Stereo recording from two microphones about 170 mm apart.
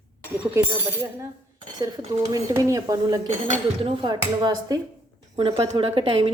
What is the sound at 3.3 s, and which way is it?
Speech, 45° right (ahead or behind).